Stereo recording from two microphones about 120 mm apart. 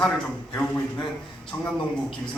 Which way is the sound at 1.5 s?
15° left (ahead or behind).